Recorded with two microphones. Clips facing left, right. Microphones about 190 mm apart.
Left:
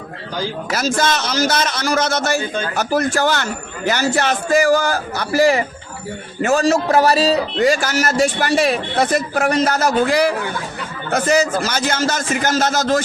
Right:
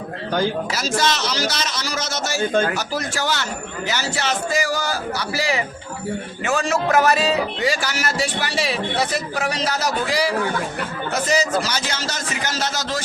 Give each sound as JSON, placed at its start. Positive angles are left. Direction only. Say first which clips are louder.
{"t": 0.7, "sound": "a man's voice", "louder": "left 3 dB", "side_deg": 50}